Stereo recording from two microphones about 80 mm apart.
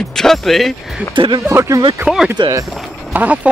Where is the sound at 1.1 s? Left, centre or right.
Right.